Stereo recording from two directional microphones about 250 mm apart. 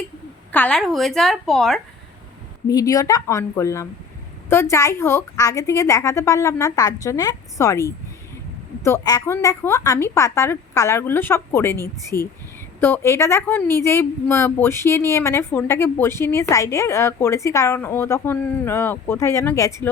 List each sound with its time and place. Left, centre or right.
0.5 s a woman's voice: centre
2.6 s speech: centre